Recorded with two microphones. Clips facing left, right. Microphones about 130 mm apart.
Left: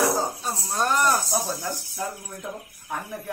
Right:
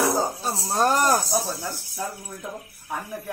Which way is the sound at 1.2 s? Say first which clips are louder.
Right 1 dB; 5° right (ahead or behind).